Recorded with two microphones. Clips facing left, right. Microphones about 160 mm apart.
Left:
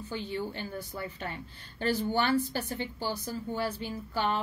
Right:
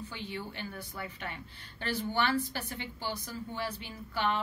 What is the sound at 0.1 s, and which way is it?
Speech, 35° left (ahead or behind).